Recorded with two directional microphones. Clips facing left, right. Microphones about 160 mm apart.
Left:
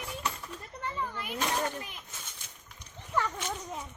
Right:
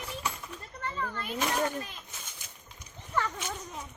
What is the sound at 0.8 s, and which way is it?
Speech, 10° left (ahead or behind).